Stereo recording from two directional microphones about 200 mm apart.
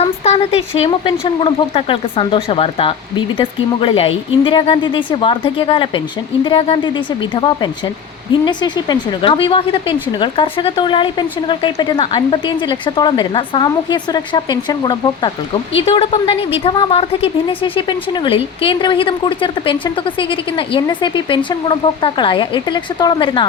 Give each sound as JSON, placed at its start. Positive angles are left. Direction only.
{"t": 0.0, "sound": "a woman's voice", "side_deg": 30}